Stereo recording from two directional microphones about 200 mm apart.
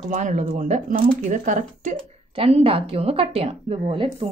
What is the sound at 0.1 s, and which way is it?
Speech, 35° right (ahead or behind).